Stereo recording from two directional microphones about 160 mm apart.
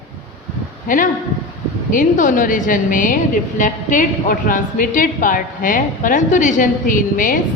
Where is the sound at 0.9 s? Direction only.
55° left (ahead or behind).